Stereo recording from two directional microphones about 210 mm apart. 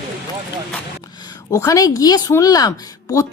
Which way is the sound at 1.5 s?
15° left (ahead or behind).